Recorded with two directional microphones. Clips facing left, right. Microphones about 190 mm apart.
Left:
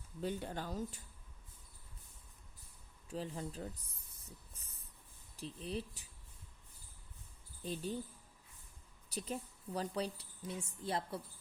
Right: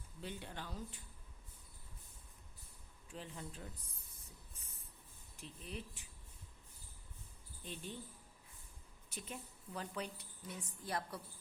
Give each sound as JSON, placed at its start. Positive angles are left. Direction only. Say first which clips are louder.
{"t": 0.2, "sound": "speech", "louder": "left 8 dB", "side_deg": 40}
{"t": 3.1, "sound": "a woman's voice", "louder": "left 7 dB", "side_deg": 35}
{"t": 5.4, "sound": "a woman's voice", "louder": "left 7 dB", "side_deg": 35}
{"t": 7.6, "sound": "a woman's voice", "louder": "left 7 dB", "side_deg": 35}
{"t": 9.0, "sound": "a woman's voice", "louder": "left 7 dB", "side_deg": 35}